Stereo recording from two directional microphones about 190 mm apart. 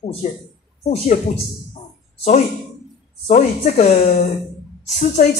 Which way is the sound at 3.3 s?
35° left (ahead or behind).